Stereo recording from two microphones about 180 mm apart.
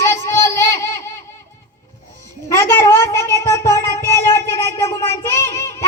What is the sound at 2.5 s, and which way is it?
Music, 15° left (ahead or behind).